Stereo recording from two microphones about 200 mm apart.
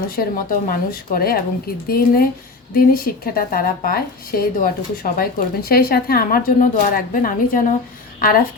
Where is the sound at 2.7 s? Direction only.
45° left (ahead or behind).